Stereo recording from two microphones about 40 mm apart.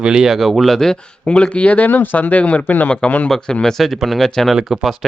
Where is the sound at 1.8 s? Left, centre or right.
Left.